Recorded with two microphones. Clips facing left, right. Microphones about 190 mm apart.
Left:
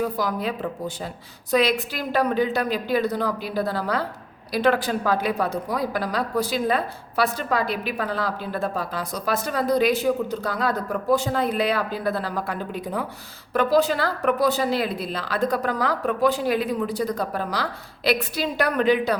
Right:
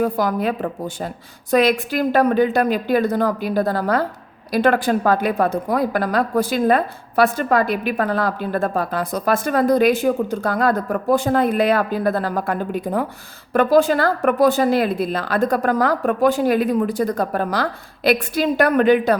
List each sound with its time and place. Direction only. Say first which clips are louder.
0.0 s a woman's voice: right 5 dB; 50° right (ahead or behind)